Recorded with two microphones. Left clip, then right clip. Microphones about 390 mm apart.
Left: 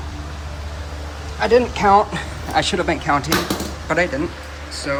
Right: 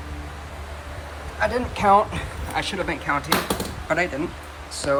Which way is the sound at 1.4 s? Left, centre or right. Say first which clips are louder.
Left 8 dB; centre.